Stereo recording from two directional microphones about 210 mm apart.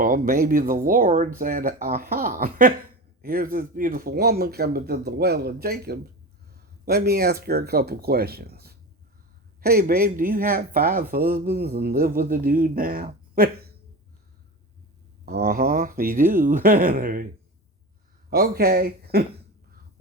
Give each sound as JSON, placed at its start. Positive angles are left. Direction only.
{"t": 0.0, "sound": "speech", "side_deg": -40}
{"t": 15.3, "sound": "speech", "side_deg": -50}
{"t": 18.3, "sound": "speech", "side_deg": -45}